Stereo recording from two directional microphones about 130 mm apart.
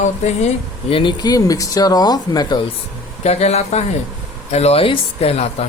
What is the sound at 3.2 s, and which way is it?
Speech, 55° left (ahead or behind).